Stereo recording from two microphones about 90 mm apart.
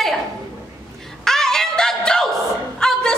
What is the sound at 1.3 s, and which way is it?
Music, 5° left (ahead or behind).